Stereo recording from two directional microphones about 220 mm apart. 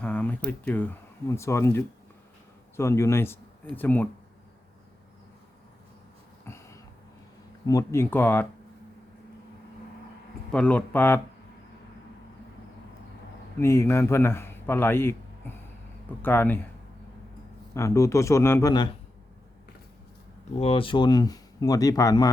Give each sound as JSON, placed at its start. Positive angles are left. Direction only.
{"t": 0.0, "sound": "speech", "side_deg": 5}
{"t": 6.4, "sound": "a sound", "side_deg": 10}
{"t": 7.7, "sound": "speech", "side_deg": 15}
{"t": 10.5, "sound": "speech", "side_deg": 5}
{"t": 13.6, "sound": "a man's voice", "side_deg": 10}
{"t": 17.7, "sound": "speech", "side_deg": 15}
{"t": 20.6, "sound": "speech", "side_deg": 25}